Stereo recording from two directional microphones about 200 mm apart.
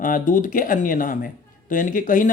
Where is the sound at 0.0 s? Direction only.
40° left (ahead or behind).